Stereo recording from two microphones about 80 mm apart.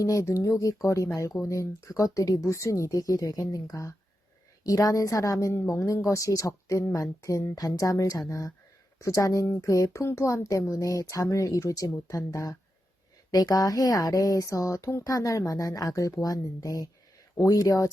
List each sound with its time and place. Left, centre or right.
0.0 s speech: left